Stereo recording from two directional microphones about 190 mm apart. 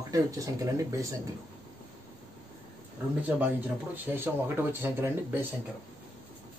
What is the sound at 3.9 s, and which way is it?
Speech, 10° right (ahead or behind).